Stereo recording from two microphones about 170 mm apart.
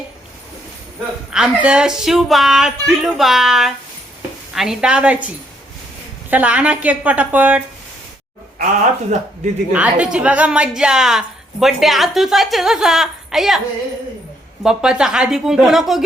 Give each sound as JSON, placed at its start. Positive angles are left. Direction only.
{"t": 1.3, "sound": "a woman's voice", "side_deg": -5}
{"t": 6.3, "sound": "a woman's voice", "side_deg": -10}
{"t": 8.5, "sound": "a man's voice", "side_deg": -45}
{"t": 9.7, "sound": "a woman's voice", "side_deg": -10}
{"t": 14.6, "sound": "speech", "side_deg": -5}